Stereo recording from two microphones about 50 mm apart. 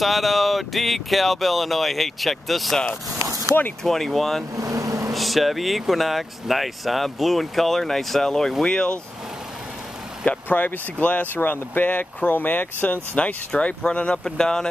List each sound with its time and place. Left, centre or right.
0.0 s speech: centre
3.8 s speech: centre
4.6 s vehicle: right
5.1 s speech: centre
10.2 s speech: left; by 14.7 s centre